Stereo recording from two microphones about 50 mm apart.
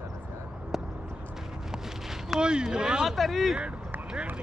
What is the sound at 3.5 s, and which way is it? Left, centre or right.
Vehicle, right.